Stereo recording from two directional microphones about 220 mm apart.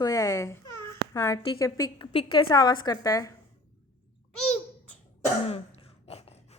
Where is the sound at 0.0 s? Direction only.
15° left (ahead or behind).